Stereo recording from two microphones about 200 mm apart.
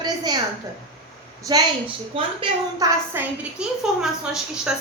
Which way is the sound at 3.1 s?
5° right (ahead or behind).